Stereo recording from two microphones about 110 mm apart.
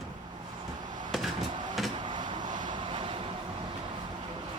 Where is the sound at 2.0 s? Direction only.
45° right (ahead or behind).